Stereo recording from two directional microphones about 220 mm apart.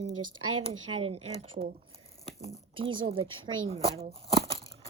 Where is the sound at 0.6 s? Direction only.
25° right (ahead or behind).